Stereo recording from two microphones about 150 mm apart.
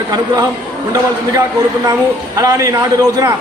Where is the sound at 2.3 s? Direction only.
25° right (ahead or behind).